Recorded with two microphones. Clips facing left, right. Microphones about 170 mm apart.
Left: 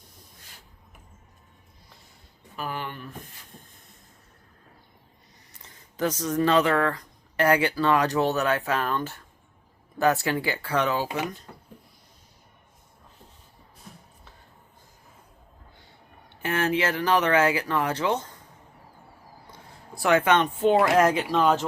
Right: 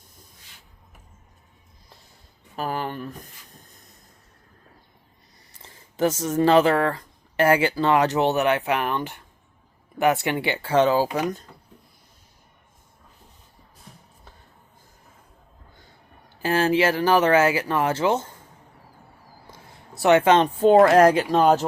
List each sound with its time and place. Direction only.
2.6 s speech: 40° right (ahead or behind)
3.7 s vehicle: 40° right (ahead or behind)
5.5 s speech: 30° right (ahead or behind)
16.3 s speech: 30° right (ahead or behind)
19.6 s speech: 25° right (ahead or behind)